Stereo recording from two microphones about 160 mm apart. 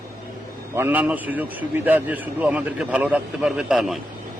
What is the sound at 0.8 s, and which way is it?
A man's voice, 10° right (ahead or behind).